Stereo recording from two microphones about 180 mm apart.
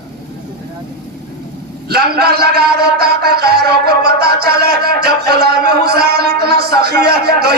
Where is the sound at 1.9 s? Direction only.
60° right (ahead or behind).